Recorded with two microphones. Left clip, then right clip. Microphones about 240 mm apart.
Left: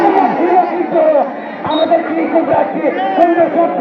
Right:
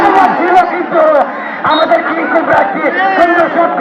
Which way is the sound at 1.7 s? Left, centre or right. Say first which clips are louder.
Even; right.